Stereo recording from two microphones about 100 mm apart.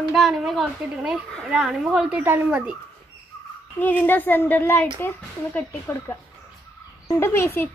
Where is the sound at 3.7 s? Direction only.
15° left (ahead or behind).